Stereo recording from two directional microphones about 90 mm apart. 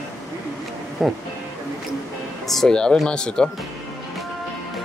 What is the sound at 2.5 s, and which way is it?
Speech, 5° left (ahead or behind).